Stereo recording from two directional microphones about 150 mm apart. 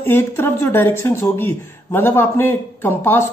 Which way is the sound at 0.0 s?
15° left (ahead or behind).